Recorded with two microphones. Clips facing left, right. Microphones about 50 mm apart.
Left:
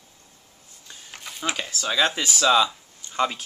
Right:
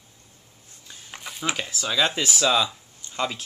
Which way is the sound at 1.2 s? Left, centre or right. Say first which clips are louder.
Even; centre.